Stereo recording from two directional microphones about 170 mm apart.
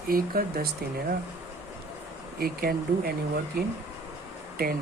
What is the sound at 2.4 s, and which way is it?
Speech, 60° right (ahead or behind).